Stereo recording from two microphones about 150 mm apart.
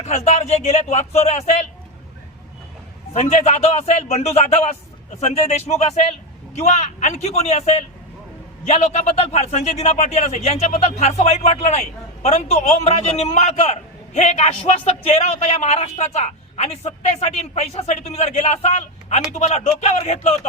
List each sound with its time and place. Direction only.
0.3 s a man's voice: 45° left (ahead or behind)
3.1 s a man's voice: 50° left (ahead or behind)